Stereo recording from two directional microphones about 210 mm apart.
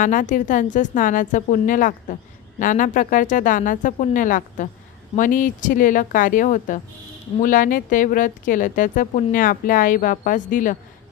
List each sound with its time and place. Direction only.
0.0 s speech: 40° left (ahead or behind)